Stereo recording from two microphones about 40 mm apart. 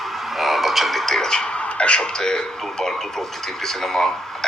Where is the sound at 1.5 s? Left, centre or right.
Left.